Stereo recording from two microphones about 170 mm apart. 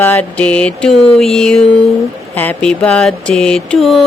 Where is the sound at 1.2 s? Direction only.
Centre (ahead or behind).